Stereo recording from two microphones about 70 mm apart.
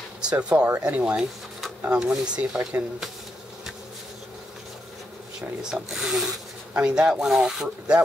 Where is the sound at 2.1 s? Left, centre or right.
Centre.